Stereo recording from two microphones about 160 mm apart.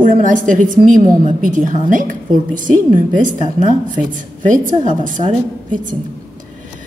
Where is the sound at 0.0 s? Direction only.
55° right (ahead or behind).